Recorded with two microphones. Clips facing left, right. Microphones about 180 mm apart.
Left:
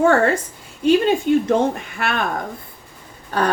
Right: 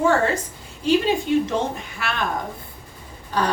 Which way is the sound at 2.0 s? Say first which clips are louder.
Left 5 dB; 55° left (ahead or behind).